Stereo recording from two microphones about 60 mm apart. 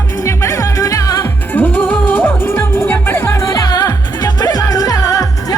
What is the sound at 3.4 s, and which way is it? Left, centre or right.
Music, left.